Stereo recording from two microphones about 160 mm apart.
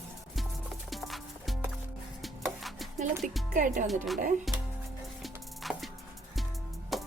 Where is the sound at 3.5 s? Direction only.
50° right (ahead or behind).